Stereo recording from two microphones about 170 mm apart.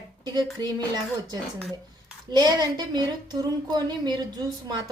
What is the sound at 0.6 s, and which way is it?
Speech, 25° right (ahead or behind).